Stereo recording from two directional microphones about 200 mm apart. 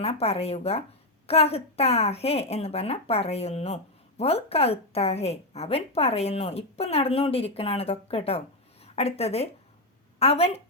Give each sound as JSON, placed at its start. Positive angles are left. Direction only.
{"t": 0.0, "sound": "a woman's voice", "side_deg": 30}